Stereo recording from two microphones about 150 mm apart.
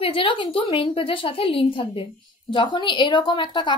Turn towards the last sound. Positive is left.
turn(degrees=30)  # may be behind; listen again after turning